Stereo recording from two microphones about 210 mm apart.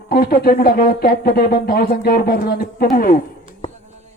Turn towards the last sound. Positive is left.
turn(degrees=40)  # may be behind; listen again after turning